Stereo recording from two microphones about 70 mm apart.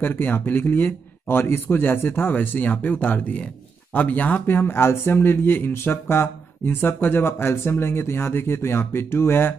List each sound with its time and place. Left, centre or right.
0.0 s speech: left